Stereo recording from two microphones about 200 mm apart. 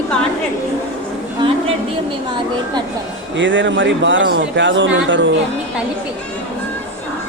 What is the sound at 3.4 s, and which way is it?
Speech, 65° right (ahead or behind).